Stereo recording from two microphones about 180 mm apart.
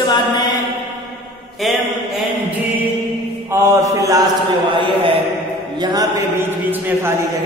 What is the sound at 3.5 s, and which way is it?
Mantra, 15° right (ahead or behind).